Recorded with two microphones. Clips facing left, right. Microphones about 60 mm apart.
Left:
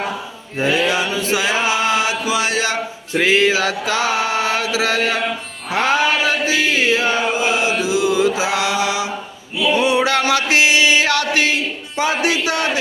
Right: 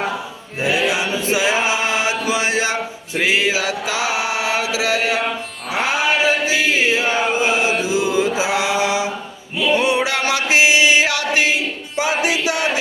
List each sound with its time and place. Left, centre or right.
0.6 s mantra: centre
1.1 s chant: right
2.3 s mantra: right
3.2 s mantra: centre
7.3 s chant: right
9.7 s male singing: right
10.3 s chant: centre